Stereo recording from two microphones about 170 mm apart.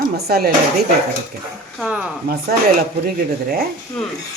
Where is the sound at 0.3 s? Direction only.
65° right (ahead or behind).